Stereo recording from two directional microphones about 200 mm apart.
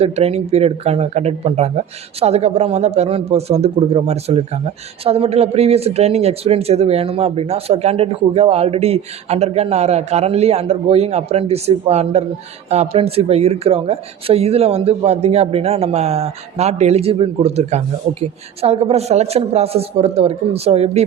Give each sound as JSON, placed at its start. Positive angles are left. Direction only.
{"t": 0.0, "sound": "a man's voice", "side_deg": -30}